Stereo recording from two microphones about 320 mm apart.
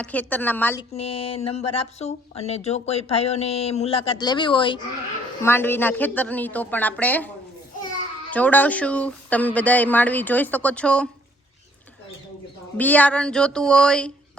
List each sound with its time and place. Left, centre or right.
0.0 s speech: centre
0.9 s a woman's voice: centre
8.3 s speech: centre
12.7 s speech: centre